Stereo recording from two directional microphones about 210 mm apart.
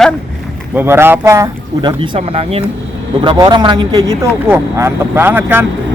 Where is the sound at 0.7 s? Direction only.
10° right (ahead or behind).